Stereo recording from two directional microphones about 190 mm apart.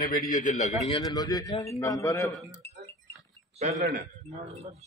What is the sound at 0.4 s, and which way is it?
Speech, 40° left (ahead or behind).